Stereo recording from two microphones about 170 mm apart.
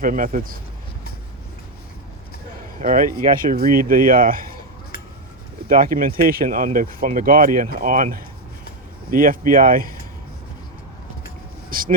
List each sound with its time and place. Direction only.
0.0 s speech: 55° right (ahead or behind)
2.7 s speech: 50° right (ahead or behind)
5.6 s speech: 55° right (ahead or behind)
11.7 s vehicle: 55° right (ahead or behind)